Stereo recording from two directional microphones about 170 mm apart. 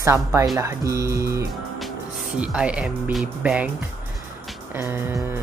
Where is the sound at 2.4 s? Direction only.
5° right (ahead or behind).